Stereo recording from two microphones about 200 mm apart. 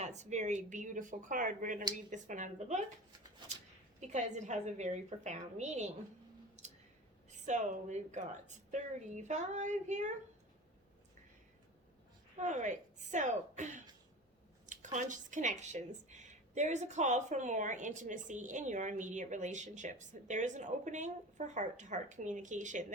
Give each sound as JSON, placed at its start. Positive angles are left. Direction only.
{"t": 0.0, "sound": "a woman's voice", "side_deg": -35}
{"t": 4.0, "sound": "a woman's voice", "side_deg": -35}
{"t": 7.3, "sound": "a woman's voice", "side_deg": -35}
{"t": 12.4, "sound": "a woman's voice", "side_deg": -35}